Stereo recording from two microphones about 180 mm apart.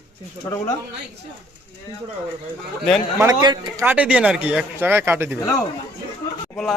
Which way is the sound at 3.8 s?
10° right (ahead or behind).